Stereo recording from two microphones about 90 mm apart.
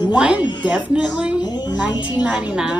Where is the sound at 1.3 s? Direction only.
50° left (ahead or behind).